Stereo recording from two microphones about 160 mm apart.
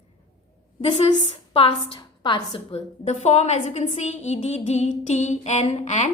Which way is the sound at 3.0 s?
45° left (ahead or behind).